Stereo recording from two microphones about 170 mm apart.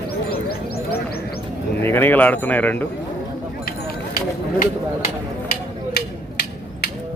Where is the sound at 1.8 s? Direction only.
10° left (ahead or behind).